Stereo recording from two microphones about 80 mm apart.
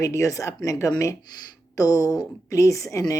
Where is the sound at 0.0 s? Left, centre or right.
Left.